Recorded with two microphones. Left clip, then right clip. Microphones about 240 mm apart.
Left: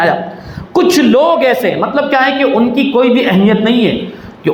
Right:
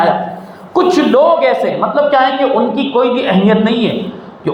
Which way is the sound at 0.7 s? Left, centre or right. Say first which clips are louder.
Left 1 dB; left.